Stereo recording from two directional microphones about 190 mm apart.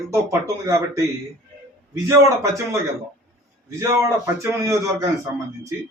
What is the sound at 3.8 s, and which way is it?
Speech, 15° right (ahead or behind).